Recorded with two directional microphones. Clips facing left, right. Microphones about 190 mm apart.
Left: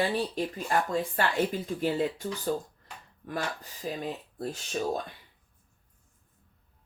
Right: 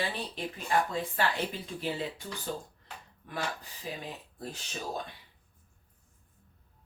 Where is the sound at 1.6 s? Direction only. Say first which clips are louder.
Left 7 dB; 45° left (ahead or behind).